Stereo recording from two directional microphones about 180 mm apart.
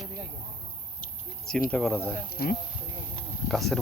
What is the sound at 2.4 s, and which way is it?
Speech, 55° left (ahead or behind).